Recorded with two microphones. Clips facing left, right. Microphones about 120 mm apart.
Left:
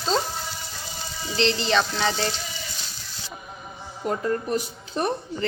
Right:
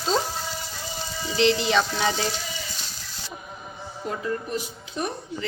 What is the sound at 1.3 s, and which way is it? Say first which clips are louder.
Sizzle: right 1 dB; 10° right (ahead or behind).